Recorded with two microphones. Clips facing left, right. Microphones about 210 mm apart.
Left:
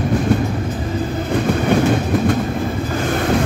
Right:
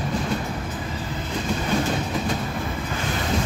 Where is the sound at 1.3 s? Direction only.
65° left (ahead or behind).